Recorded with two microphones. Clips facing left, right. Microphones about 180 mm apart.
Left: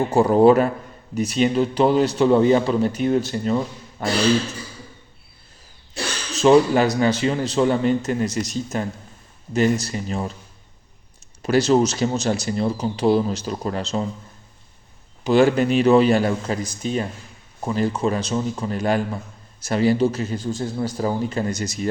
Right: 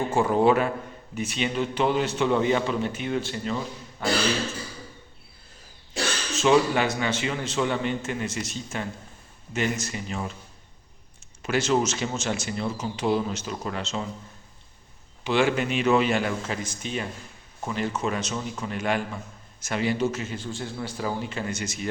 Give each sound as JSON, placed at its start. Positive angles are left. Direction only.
{"t": 0.1, "sound": "a man's voice", "side_deg": 35}
{"t": 4.0, "sound": "a sound", "side_deg": 45}
{"t": 6.3, "sound": "a man's voice", "side_deg": 40}
{"t": 11.4, "sound": "a man's voice", "side_deg": 35}
{"t": 15.2, "sound": "a man's voice", "side_deg": 40}